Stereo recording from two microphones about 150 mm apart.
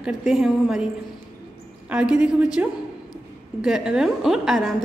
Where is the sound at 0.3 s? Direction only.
5° right (ahead or behind).